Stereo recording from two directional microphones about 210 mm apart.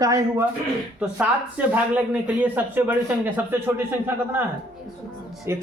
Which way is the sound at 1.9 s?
5° right (ahead or behind).